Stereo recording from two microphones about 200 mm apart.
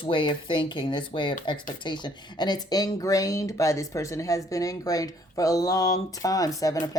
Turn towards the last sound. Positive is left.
turn(degrees=15)  # may be behind; listen again after turning